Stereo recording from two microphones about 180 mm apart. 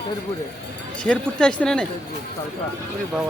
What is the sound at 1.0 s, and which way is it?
Speech, 5° left (ahead or behind).